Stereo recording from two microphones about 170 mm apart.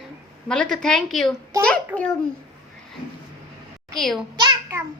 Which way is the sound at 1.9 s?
10° right (ahead or behind).